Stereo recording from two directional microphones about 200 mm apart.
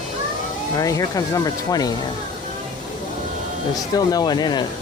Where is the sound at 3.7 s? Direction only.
20° left (ahead or behind).